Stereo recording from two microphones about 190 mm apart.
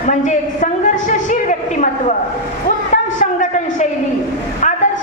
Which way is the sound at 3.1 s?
40° left (ahead or behind).